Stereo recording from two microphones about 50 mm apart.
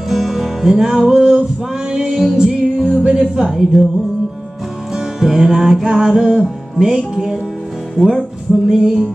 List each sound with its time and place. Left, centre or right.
0.1 s music: centre
4.9 s music: centre